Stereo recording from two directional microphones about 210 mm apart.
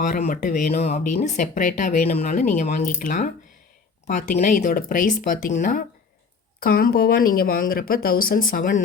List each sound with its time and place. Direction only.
0.0 s speech: 35° left (ahead or behind)